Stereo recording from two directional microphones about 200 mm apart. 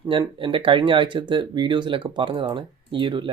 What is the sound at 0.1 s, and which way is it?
Speech, 25° right (ahead or behind).